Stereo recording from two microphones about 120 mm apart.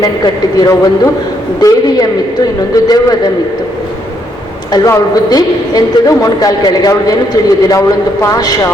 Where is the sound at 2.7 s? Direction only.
35° left (ahead or behind).